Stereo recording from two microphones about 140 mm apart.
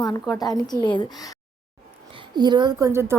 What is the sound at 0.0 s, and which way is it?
A woman's voice, 25° left (ahead or behind).